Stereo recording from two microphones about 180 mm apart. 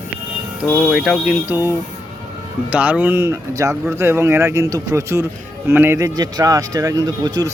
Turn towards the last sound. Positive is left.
turn(degrees=-20)  # may be behind; listen again after turning